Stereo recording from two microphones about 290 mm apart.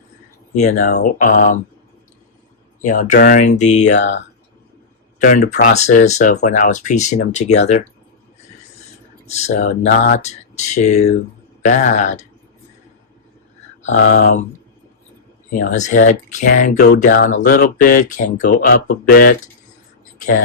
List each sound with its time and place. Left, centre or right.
0.5 s speech: left
2.8 s speech: left
5.2 s speech: left
9.3 s speech: left
13.8 s speech: left
15.4 s speech: left